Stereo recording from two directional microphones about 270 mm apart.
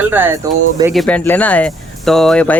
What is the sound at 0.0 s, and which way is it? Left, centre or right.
Speech, centre.